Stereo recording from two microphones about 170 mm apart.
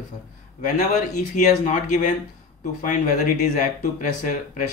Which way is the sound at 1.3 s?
40° left (ahead or behind).